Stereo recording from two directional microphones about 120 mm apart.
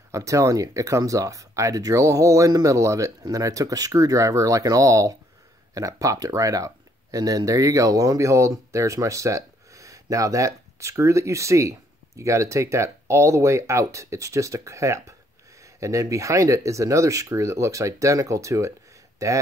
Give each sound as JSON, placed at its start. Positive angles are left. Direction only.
{"t": 0.1, "sound": "speech", "side_deg": -25}